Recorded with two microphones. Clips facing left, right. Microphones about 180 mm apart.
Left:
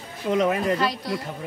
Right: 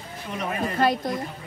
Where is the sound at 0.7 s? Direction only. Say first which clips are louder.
Right 3 dB; 50° right (ahead or behind).